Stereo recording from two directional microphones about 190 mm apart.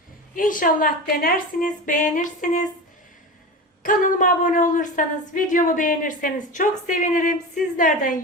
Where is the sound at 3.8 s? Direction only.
45° left (ahead or behind).